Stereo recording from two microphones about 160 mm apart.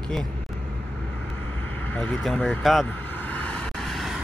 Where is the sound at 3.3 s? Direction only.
10° left (ahead or behind).